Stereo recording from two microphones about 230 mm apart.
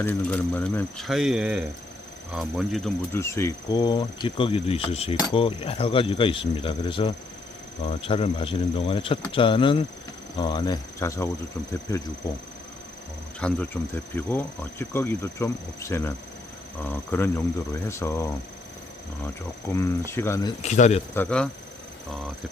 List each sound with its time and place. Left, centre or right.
0.0 s speech: centre
13.4 s speech: centre
19.7 s speech: centre; by 21.0 s left
21.2 s speech: centre